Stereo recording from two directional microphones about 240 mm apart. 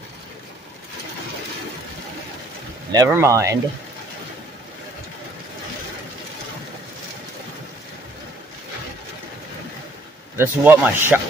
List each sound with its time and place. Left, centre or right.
2.9 s speech: centre
10.3 s speech: centre